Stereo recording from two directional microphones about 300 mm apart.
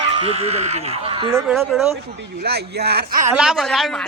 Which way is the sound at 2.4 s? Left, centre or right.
Right.